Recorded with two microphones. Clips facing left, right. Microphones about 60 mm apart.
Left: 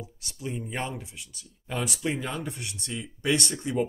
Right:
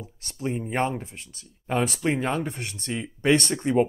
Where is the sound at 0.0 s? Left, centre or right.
Right.